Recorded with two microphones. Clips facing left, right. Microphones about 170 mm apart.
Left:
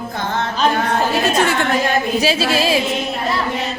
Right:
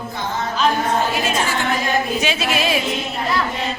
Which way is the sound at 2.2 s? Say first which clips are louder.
Left 4 dB; 30° left (ahead or behind).